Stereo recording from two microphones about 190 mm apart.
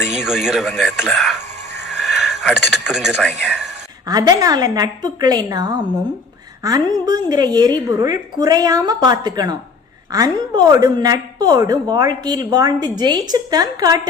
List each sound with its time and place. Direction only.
0.0 s speech: centre (ahead or behind)
4.0 s a woman's voice: 20° right (ahead or behind)